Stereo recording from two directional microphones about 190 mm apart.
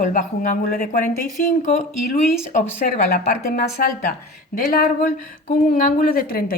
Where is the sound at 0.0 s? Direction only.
40° left (ahead or behind).